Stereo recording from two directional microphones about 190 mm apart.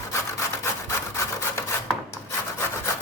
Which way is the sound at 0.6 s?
15° left (ahead or behind).